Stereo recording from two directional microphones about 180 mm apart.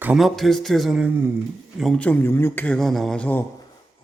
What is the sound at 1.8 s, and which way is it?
A man's voice, 5° left (ahead or behind).